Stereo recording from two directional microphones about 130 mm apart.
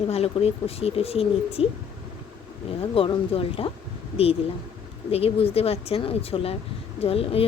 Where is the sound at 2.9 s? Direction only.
45° left (ahead or behind).